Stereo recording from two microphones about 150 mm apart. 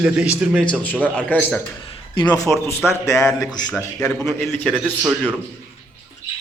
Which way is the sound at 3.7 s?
5° left (ahead or behind).